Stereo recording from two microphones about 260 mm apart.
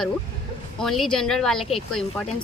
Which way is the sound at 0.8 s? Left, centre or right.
Centre.